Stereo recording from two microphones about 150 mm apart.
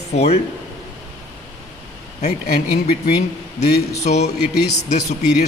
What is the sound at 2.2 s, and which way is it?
Speech, 50° left (ahead or behind).